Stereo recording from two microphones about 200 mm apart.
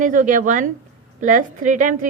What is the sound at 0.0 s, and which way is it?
A woman's voice, 40° right (ahead or behind).